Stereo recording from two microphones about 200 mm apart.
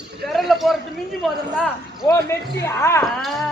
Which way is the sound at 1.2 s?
Centre (ahead or behind).